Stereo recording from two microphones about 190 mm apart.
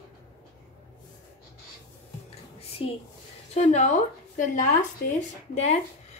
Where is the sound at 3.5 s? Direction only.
35° left (ahead or behind).